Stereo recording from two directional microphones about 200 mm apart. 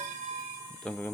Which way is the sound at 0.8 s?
5° left (ahead or behind).